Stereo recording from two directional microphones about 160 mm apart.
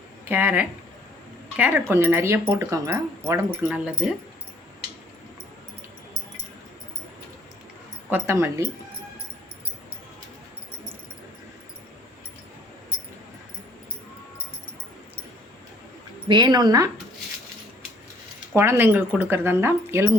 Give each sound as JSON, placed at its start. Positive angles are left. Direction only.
{"t": 0.3, "sound": "speech", "side_deg": -10}
{"t": 8.1, "sound": "speech", "side_deg": -15}
{"t": 16.3, "sound": "speech", "side_deg": -25}
{"t": 18.5, "sound": "speech", "side_deg": -15}